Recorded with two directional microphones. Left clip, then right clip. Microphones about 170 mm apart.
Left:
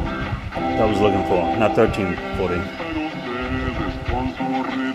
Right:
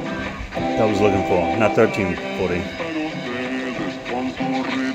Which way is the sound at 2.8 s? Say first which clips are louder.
Right 1 dB; 25° right (ahead or behind).